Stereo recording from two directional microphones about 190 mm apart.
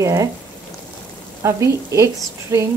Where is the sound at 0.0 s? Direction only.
15° right (ahead or behind).